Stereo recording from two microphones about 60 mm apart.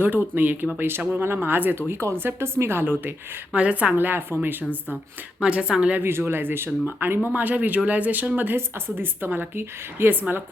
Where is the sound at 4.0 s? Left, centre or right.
Right.